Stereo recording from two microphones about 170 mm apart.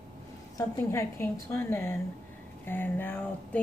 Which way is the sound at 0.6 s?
15° left (ahead or behind).